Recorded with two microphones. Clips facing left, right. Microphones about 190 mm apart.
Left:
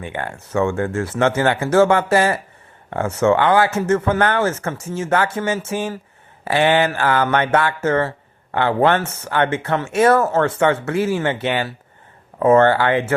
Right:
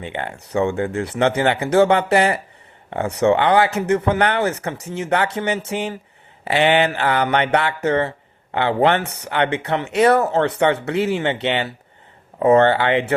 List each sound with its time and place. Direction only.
0.0 s speech: 20° right (ahead or behind)